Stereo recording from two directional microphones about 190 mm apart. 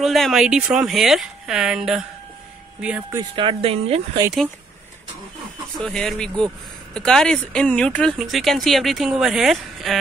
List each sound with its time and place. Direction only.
0.0 s speech: centre (ahead or behind)
3.2 s speech: 25° right (ahead or behind)
5.8 s speech: centre (ahead or behind)